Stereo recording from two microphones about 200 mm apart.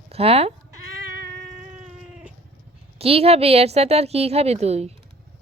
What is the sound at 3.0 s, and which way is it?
Speech, 30° right (ahead or behind).